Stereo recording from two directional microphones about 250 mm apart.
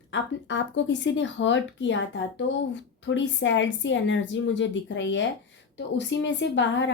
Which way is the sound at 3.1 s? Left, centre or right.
Left.